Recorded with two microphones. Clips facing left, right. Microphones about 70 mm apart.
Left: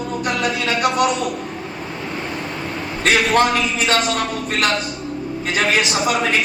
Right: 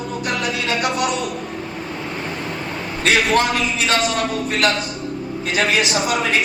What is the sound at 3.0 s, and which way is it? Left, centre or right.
A man's voice, left.